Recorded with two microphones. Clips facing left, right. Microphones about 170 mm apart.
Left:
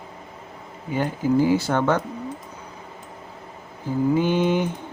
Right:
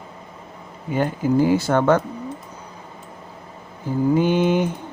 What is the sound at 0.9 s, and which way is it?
A man's voice, 50° right (ahead or behind).